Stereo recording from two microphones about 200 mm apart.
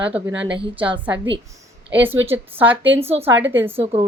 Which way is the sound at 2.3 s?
10° right (ahead or behind).